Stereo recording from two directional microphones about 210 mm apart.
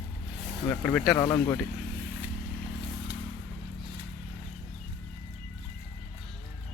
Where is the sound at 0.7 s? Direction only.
5° left (ahead or behind).